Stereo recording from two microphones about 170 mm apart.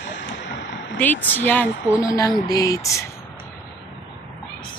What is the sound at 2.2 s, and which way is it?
Speech, 20° left (ahead or behind).